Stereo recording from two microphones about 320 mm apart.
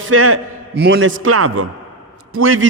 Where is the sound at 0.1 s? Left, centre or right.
Right.